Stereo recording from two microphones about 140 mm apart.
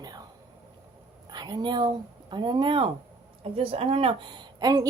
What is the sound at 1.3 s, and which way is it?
A woman's voice, 30° right (ahead or behind).